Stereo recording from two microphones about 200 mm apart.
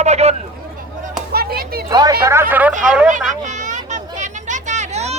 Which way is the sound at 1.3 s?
50° right (ahead or behind).